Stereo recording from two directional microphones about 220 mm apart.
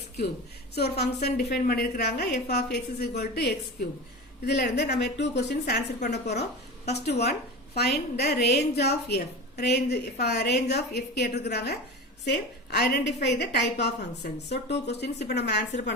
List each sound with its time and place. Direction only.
0.8 s a woman's voice: 50° left (ahead or behind)